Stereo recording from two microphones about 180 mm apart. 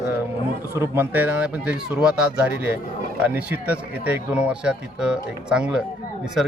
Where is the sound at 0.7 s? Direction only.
15° right (ahead or behind).